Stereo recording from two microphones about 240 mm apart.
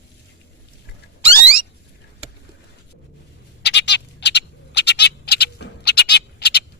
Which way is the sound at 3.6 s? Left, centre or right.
Left.